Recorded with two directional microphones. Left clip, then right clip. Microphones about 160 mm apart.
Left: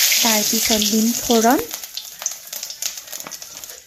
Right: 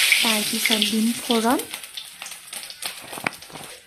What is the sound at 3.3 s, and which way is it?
Horse, 90° right.